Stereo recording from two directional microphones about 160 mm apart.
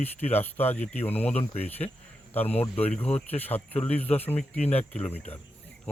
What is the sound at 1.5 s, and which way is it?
Speech, 40° left (ahead or behind).